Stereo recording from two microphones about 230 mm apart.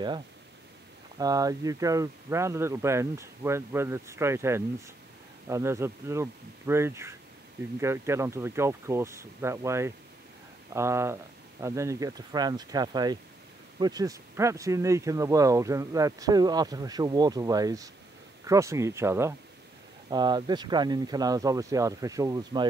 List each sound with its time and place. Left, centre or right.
1.1 s speech: centre